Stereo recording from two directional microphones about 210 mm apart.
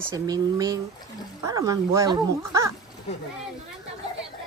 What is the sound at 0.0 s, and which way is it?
A child's voice, 15° right (ahead or behind).